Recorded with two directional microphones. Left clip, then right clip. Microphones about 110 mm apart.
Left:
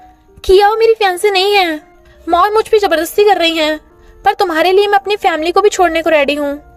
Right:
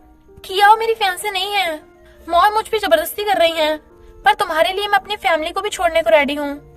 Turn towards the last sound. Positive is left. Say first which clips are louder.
# left 2 dB
turn(degrees=60)  # may be behind; listen again after turning